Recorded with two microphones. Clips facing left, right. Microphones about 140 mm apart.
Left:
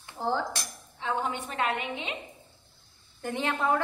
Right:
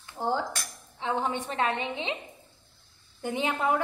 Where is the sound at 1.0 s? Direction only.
30° right (ahead or behind).